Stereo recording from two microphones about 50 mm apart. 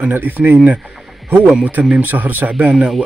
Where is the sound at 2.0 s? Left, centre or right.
Right.